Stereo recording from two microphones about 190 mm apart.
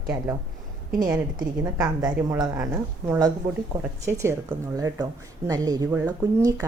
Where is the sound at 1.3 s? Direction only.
20° right (ahead or behind).